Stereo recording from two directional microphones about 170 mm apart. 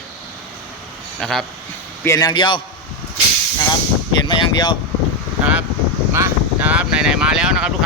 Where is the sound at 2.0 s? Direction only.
20° left (ahead or behind).